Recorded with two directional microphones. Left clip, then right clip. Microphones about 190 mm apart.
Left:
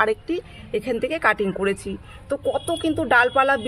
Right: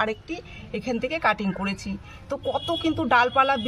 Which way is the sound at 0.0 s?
30° left (ahead or behind).